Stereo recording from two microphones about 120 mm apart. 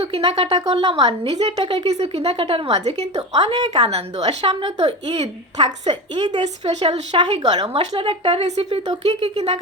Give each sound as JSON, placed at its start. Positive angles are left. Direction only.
{"t": 0.0, "sound": "a woman's voice", "side_deg": -50}
{"t": 1.5, "sound": "a woman's voice", "side_deg": -45}
{"t": 1.9, "sound": "speech", "side_deg": -55}
{"t": 3.2, "sound": "speech", "side_deg": -40}
{"t": 3.8, "sound": "speech", "side_deg": -60}
{"t": 5.9, "sound": "speech", "side_deg": -40}
{"t": 6.4, "sound": "speech", "side_deg": -65}
{"t": 7.1, "sound": "a woman's voice", "side_deg": -40}
{"t": 8.4, "sound": "speech", "side_deg": -60}